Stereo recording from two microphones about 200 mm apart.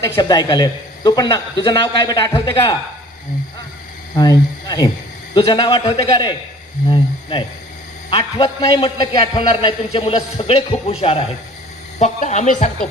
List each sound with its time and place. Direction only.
0.0 s a man's voice: 20° left (ahead or behind)
4.1 s a man's voice: 20° left (ahead or behind); by 12.8 s 40° left (ahead or behind)